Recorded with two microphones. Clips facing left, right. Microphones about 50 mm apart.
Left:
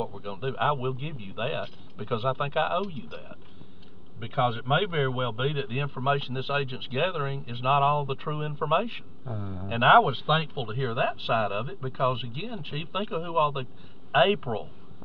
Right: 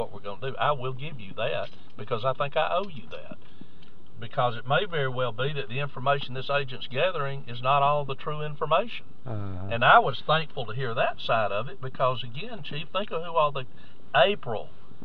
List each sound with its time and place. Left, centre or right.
0.2 s speech: centre
4.2 s a man's voice: centre
9.3 s speech: centre
9.8 s speech: centre
14.1 s speech: centre